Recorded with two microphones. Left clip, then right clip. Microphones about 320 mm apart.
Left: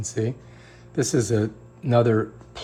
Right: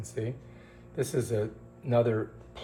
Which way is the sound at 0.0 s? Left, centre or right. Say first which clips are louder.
Left 8 dB; left.